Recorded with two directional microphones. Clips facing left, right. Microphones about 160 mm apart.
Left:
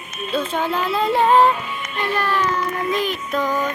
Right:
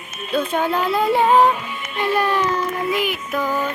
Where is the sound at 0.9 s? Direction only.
Centre (ahead or behind).